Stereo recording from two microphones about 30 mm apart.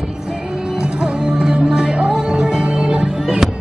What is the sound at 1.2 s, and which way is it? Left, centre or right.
Music, right.